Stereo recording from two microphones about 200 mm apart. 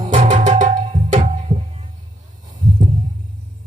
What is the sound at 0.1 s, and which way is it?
Music, 35° right (ahead or behind).